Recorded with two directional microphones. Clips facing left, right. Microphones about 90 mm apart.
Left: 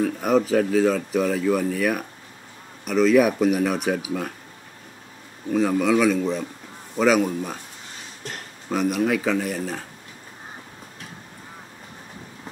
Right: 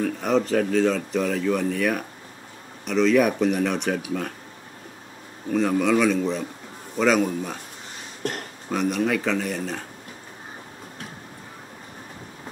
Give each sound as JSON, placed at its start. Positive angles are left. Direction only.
{"t": 0.0, "sound": "speech", "side_deg": 5}
{"t": 5.5, "sound": "speech", "side_deg": 5}
{"t": 8.2, "sound": "a sound", "side_deg": -55}
{"t": 8.6, "sound": "speech", "side_deg": 5}